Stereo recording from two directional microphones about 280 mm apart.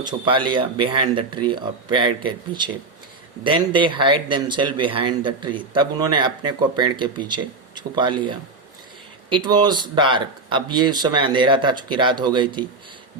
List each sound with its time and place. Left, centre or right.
0.1 s speech: centre